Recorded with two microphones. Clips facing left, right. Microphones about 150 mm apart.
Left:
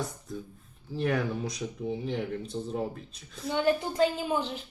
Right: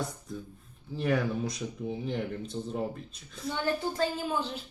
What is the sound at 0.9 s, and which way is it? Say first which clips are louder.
Speech: even; centre (ahead or behind).